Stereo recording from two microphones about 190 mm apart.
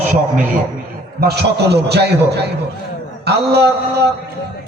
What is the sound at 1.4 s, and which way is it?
A man's voice, 60° right (ahead or behind).